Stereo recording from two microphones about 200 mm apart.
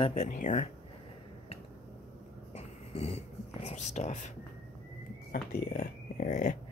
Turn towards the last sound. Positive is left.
turn(degrees=40)  # may be behind; listen again after turning